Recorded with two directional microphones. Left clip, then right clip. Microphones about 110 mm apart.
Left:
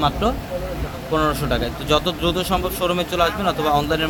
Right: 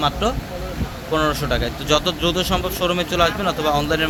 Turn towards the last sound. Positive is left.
turn(degrees=-5)  # may be behind; listen again after turning